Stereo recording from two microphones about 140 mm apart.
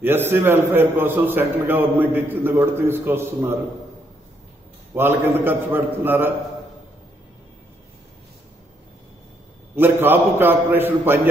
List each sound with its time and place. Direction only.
0.0 s a man's voice: 15° right (ahead or behind)
4.9 s a man's voice: 15° right (ahead or behind)
9.8 s a man's voice: 15° right (ahead or behind)